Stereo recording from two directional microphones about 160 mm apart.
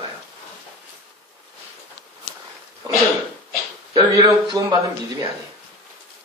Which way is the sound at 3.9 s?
25° right (ahead or behind).